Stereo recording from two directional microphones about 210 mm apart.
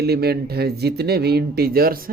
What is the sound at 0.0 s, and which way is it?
Speech, 50° right (ahead or behind).